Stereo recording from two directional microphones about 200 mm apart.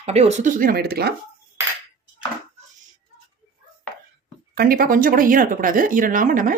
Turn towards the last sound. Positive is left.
turn(degrees=-40)  # may be behind; listen again after turning